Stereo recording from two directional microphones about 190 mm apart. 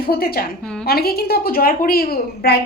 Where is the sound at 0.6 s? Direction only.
5° left (ahead or behind).